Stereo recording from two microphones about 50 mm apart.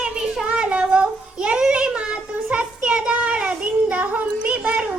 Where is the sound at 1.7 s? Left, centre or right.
Right.